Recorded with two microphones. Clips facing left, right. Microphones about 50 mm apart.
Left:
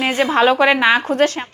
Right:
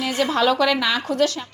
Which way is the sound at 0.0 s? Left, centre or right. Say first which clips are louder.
Left 5 dB; left.